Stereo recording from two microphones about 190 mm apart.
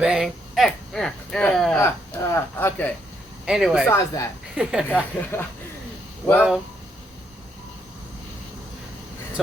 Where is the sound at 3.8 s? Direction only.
15° left (ahead or behind).